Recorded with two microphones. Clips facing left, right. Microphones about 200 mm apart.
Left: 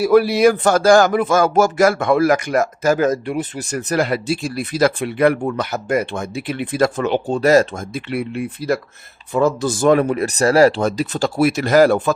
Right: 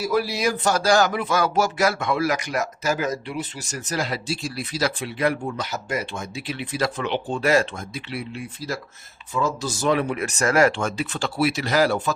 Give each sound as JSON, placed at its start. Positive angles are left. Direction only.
{"t": 0.0, "sound": "speech", "side_deg": 60}